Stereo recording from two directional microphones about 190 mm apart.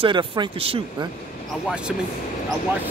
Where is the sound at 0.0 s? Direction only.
25° right (ahead or behind).